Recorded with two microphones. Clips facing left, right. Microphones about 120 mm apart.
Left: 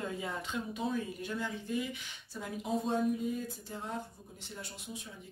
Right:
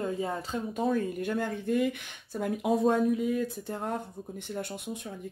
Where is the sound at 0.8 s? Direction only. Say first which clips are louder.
Right 9 dB; 50° right (ahead or behind).